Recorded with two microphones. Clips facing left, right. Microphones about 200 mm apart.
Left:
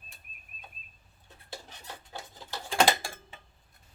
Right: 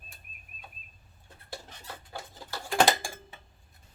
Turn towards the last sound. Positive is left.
turn(degrees=-5)  # may be behind; listen again after turning